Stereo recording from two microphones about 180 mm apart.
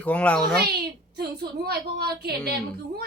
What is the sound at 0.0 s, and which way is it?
Speech, 5° left (ahead or behind).